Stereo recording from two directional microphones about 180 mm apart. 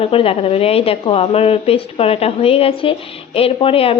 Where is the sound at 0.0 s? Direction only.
30° left (ahead or behind).